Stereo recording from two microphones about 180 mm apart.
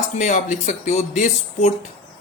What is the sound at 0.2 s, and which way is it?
Speech, 45° left (ahead or behind).